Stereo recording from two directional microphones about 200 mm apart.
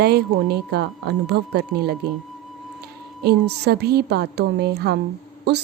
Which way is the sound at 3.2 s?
55° right (ahead or behind).